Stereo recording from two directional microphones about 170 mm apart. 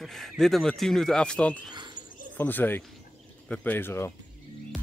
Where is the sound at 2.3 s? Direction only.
10° left (ahead or behind).